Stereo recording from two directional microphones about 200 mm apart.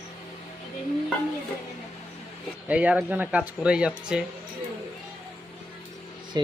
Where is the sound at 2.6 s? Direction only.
5° right (ahead or behind).